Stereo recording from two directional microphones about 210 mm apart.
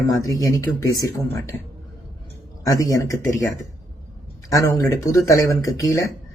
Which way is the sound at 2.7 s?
15° left (ahead or behind).